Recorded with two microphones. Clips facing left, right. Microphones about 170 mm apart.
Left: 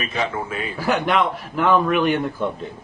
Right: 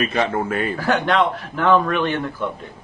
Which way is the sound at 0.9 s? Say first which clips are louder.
Even; 10° left (ahead or behind).